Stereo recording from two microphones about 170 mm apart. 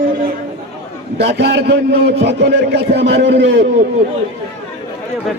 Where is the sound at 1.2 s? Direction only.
85° right.